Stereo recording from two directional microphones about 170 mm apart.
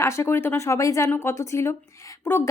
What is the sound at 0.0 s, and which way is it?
A woman's voice, 15° left (ahead or behind).